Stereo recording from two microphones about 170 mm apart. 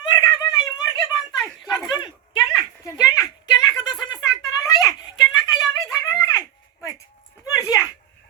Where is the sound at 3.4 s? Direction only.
25° left (ahead or behind).